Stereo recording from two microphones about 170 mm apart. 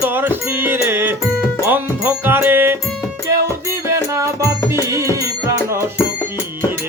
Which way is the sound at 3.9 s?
15° right (ahead or behind).